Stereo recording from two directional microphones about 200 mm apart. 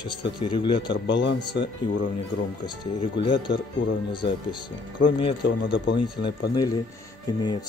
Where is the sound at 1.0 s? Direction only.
60° left (ahead or behind).